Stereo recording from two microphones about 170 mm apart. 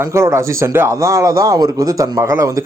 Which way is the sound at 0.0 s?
15° right (ahead or behind).